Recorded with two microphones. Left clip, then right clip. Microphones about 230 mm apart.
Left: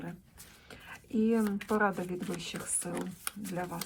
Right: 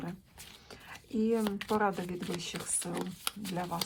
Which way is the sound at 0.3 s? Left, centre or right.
Centre.